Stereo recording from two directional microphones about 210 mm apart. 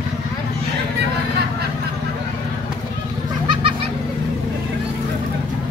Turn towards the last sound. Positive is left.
turn(degrees=-25)  # may be behind; listen again after turning